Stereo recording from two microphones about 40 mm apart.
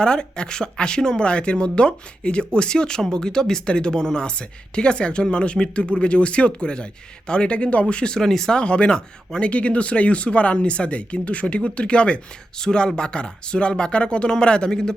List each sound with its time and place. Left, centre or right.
0.0 s speech: left
8.2 s speech: centre
8.5 s speech: left
9.5 s speech: left; by 14.9 s centre